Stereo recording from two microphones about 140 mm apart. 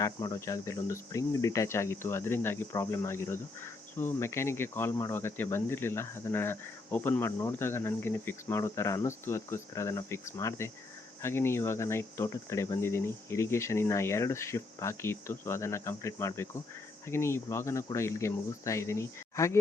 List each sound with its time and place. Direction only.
0.0 s cricket: 25° left (ahead or behind)